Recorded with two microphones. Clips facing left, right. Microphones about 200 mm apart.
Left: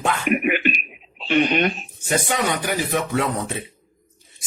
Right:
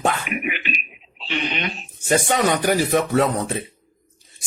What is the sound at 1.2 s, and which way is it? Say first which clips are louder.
Speech: left 8 dB; 50° left (ahead or behind).